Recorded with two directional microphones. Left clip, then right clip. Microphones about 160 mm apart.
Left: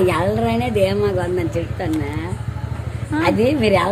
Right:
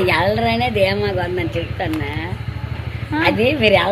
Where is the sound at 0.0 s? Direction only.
65° left (ahead or behind).